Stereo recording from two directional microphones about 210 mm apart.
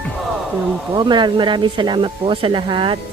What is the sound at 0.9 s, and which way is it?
Speech, 20° right (ahead or behind).